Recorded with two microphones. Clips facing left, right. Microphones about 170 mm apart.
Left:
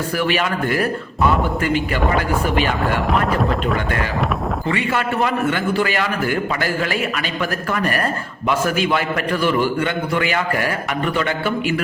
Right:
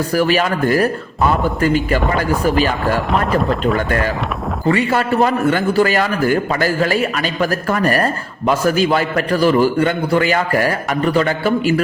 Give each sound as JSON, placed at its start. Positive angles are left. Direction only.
{"t": 0.2, "sound": "a man's voice", "side_deg": -40}
{"t": 4.6, "sound": "a man's voice", "side_deg": -40}